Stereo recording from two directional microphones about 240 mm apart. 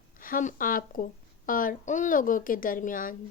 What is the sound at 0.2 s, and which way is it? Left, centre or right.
Speech, left.